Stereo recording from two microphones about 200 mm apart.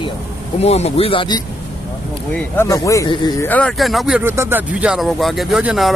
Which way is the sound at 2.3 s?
15° left (ahead or behind).